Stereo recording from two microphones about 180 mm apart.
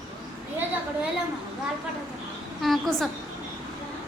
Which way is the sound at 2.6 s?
Centre (ahead or behind).